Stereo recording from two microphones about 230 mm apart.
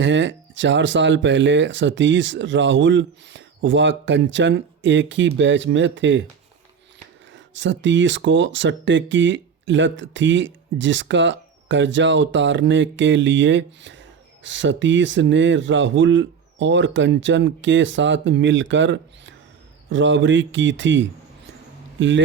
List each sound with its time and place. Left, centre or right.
0.0 s speech: right
7.3 s speech: right